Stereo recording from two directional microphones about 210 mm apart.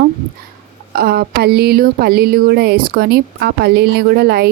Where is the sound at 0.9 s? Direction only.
45° right (ahead or behind).